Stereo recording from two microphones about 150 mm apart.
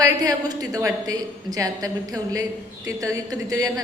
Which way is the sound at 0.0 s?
25° right (ahead or behind).